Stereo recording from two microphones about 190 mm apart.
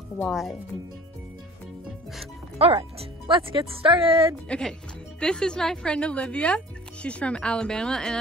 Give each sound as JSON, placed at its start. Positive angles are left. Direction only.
{"t": 0.2, "sound": "speech", "side_deg": 0}
{"t": 2.6, "sound": "speech", "side_deg": -30}
{"t": 4.5, "sound": "speech", "side_deg": 5}